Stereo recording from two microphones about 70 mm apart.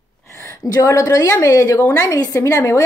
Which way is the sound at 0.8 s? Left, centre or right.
Left.